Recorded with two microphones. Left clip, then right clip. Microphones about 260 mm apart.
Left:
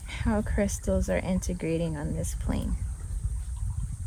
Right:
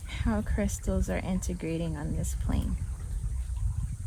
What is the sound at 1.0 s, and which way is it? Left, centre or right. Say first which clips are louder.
Speech: left 5 dB; left.